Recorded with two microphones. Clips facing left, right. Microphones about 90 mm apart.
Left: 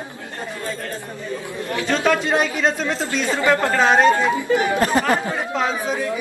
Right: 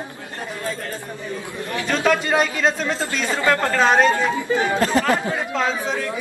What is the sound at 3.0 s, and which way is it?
Speech, 15° left (ahead or behind).